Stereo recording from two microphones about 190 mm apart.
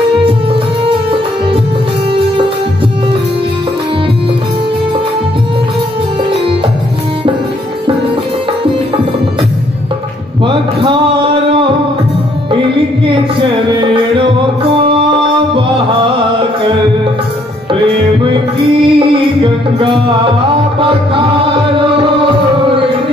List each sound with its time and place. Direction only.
10.4 s a sound: 25° right (ahead or behind)
13.0 s music: 25° right (ahead or behind)
15.5 s music: 25° right (ahead or behind)
18.9 s music: 25° right (ahead or behind)